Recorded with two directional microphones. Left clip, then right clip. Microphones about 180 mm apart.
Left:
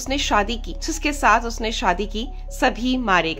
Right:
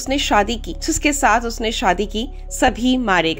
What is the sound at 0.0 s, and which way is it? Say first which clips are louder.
A woman's voice: right 4 dB; 15° right (ahead or behind).